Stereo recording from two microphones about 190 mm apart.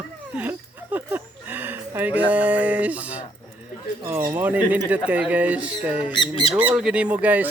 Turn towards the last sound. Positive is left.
turn(degrees=-10)  # may be behind; listen again after turning